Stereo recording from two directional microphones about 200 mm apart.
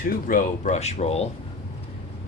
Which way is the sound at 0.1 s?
45° left (ahead or behind).